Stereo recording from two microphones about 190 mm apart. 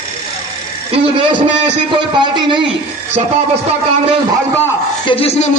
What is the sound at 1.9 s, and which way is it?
Speech, 25° right (ahead or behind).